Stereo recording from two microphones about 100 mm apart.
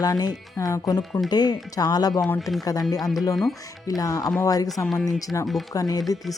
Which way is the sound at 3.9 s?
35° left (ahead or behind).